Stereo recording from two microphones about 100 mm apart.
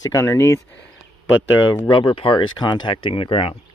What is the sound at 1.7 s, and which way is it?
Speech, 50° left (ahead or behind).